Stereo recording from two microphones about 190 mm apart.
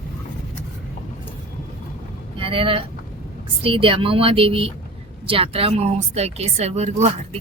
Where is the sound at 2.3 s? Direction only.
30° right (ahead or behind).